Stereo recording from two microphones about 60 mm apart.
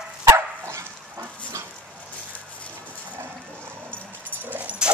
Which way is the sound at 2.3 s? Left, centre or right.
Left.